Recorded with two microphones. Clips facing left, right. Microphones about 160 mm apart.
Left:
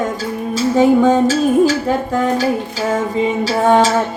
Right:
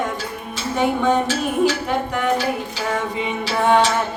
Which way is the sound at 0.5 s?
90° left.